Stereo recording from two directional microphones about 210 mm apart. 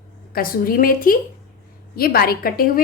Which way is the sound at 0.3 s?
45° left (ahead or behind).